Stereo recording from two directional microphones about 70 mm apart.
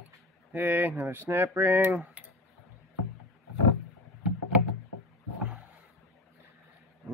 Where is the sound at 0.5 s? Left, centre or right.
Right.